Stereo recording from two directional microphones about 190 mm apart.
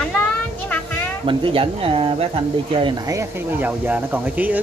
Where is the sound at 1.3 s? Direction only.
25° right (ahead or behind).